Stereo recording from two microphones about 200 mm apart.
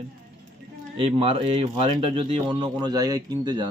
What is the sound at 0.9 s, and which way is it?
Speech, 25° right (ahead or behind).